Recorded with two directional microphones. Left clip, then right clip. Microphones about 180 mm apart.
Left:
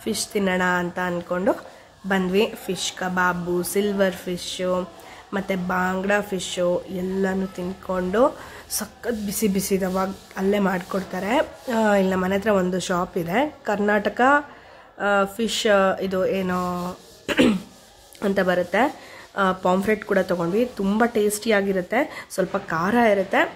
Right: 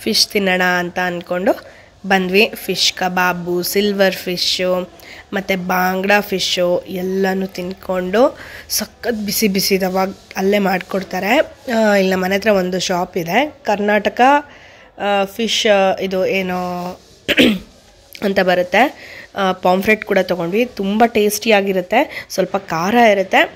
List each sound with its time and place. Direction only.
0.0 s speech: 20° right (ahead or behind)